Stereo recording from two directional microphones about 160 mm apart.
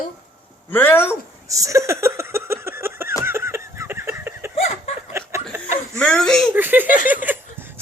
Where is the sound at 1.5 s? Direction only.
20° right (ahead or behind).